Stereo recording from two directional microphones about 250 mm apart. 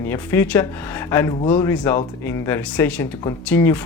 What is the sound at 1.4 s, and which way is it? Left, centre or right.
Speech, left.